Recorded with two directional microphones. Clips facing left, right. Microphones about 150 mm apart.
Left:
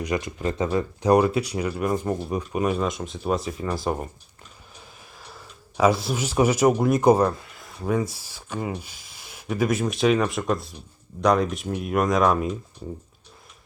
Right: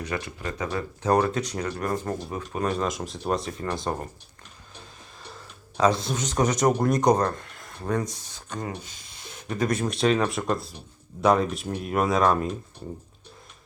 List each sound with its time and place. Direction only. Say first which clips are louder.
0.0 s speech: left 5 dB; 15° left (ahead or behind)
5.2 s speech: right 1 dB; 10° left (ahead or behind)